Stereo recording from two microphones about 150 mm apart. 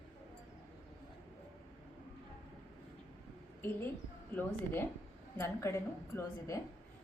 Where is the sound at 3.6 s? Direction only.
15° left (ahead or behind).